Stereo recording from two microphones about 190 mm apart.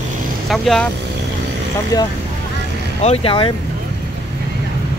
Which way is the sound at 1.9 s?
20° left (ahead or behind).